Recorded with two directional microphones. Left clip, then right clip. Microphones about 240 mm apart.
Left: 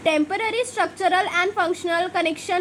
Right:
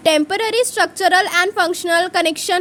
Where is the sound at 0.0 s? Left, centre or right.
Right.